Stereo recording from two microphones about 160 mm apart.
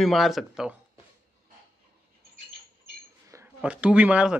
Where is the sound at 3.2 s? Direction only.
20° right (ahead or behind).